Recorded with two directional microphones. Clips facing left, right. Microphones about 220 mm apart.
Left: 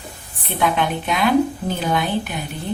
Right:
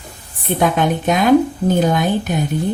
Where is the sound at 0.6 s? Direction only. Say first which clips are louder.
Right 4 dB; 45° right (ahead or behind).